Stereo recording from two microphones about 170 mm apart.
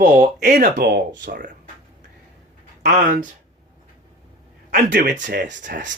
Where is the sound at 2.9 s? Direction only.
55° right (ahead or behind).